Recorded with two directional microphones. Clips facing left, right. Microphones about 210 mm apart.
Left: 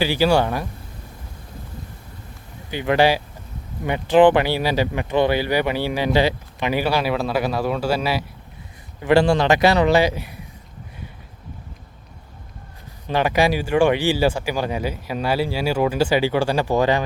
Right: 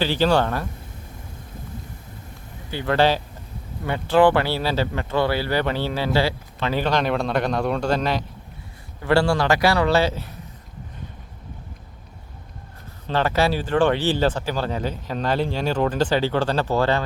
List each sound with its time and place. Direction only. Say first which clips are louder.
0.0 s speech: left 2 dB; 10° left (ahead or behind)
2.6 s speech: left 2 dB; 15° left (ahead or behind)
13.1 s speech: left 2 dB; 15° left (ahead or behind)